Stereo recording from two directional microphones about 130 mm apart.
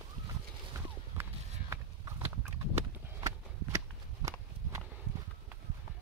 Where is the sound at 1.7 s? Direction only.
20° right (ahead or behind).